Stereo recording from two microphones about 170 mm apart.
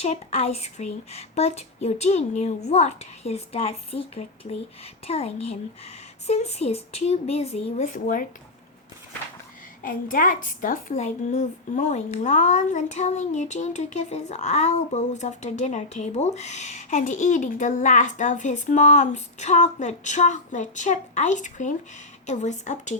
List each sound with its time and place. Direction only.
0.0 s a child's voice: 35° left (ahead or behind)
7.9 s speech: 55° left (ahead or behind)
9.8 s a woman's voice: 50° left (ahead or behind)